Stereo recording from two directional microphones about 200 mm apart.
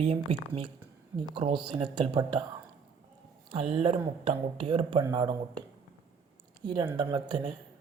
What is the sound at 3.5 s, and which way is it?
Speech, 25° right (ahead or behind).